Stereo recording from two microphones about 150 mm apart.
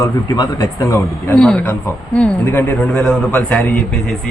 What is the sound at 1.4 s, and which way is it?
Speech, 5° left (ahead or behind).